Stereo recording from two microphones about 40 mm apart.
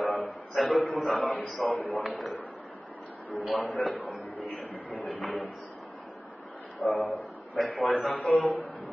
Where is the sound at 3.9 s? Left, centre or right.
Left.